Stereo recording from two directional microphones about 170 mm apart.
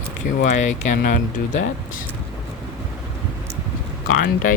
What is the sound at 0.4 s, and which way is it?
Speech, 45° left (ahead or behind).